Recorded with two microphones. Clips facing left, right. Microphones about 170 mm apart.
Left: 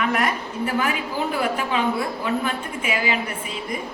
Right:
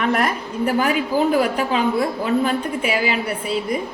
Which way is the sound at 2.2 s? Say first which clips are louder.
Right 5 dB; 35° right (ahead or behind).